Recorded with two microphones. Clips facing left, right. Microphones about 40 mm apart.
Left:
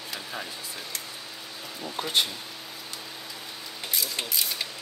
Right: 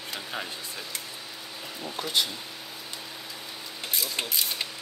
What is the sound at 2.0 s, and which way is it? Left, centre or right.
Speech, left.